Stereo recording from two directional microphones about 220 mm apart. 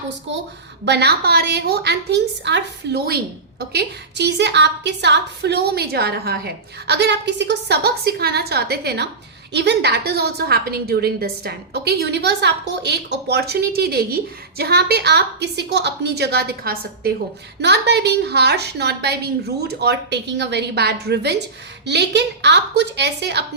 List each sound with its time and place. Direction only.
0.9 s a woman's voice: 50° right (ahead or behind)